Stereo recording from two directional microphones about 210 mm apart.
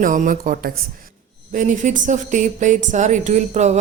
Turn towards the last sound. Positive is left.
turn(degrees=-35)  # may be behind; listen again after turning